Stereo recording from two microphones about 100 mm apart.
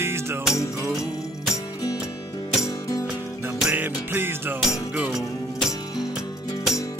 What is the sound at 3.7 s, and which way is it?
Music, 20° right (ahead or behind).